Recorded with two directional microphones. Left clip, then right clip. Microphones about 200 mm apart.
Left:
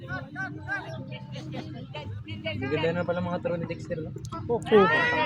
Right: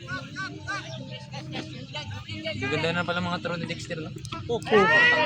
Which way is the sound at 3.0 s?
25° right (ahead or behind).